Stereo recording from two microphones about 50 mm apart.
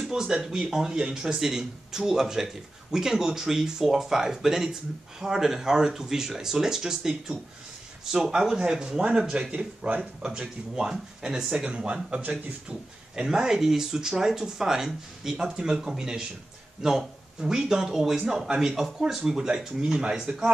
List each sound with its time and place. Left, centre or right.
0.0 s speech: centre; by 10.0 s right
10.8 s speech: centre
11.5 s speech: centre